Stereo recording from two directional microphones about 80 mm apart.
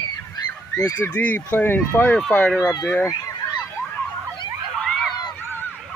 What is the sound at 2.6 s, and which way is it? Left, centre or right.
Speech, left.